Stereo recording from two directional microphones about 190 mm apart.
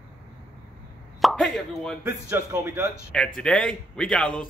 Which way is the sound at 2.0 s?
15° right (ahead or behind).